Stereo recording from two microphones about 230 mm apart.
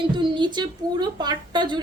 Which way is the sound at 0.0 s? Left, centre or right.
Right.